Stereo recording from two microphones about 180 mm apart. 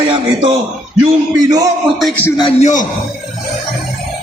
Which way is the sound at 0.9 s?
20° right (ahead or behind).